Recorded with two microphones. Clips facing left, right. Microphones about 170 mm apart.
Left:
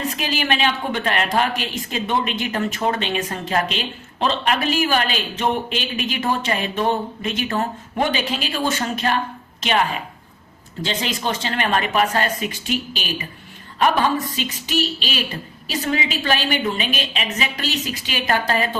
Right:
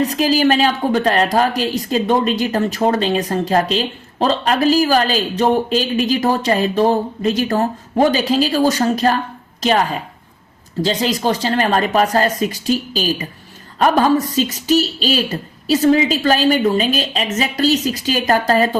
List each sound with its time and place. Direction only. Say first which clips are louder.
0.0 s a woman's voice: right 10 dB; 35° right (ahead or behind)